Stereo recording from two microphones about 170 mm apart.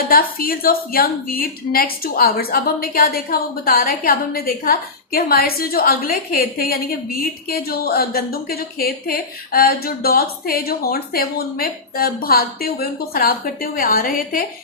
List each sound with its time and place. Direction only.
0.1 s a woman's voice: 60° left (ahead or behind)